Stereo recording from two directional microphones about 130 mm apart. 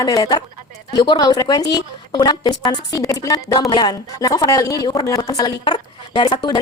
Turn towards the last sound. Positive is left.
turn(degrees=35)  # may be behind; listen again after turning